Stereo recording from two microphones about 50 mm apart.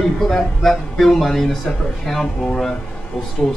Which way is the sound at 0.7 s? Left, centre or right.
Centre.